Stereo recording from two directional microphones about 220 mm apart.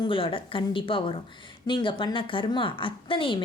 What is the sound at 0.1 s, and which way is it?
A woman's voice, 25° left (ahead or behind).